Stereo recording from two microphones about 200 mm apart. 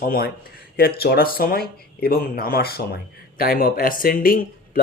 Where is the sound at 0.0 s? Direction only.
45° left (ahead or behind).